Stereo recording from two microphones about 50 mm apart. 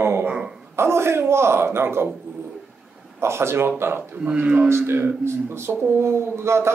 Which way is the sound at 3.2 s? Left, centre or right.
Right.